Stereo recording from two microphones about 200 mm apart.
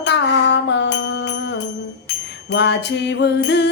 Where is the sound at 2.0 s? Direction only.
60° left (ahead or behind).